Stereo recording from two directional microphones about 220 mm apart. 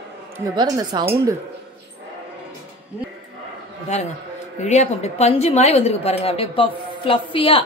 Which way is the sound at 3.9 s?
30° left (ahead or behind).